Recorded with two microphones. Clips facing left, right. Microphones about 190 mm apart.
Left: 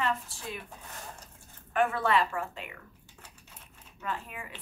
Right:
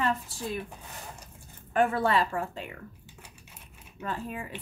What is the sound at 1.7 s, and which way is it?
Speech, 35° right (ahead or behind).